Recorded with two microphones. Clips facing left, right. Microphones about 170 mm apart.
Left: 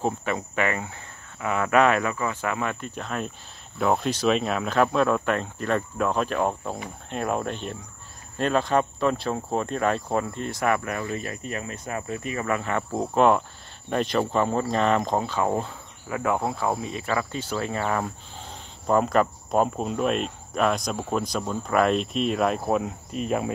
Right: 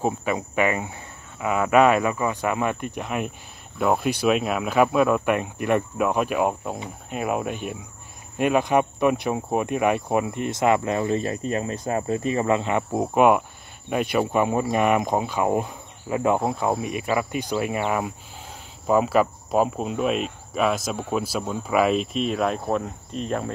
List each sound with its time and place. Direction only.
0.0 s speech: 10° right (ahead or behind); by 23.5 s 5° left (ahead or behind)